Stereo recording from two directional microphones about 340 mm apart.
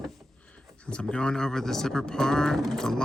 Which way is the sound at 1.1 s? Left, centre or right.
Centre.